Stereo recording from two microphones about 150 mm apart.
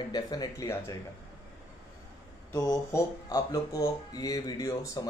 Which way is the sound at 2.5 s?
25° left (ahead or behind).